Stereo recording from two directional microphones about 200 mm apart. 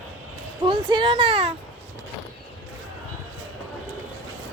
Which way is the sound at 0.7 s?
25° right (ahead or behind).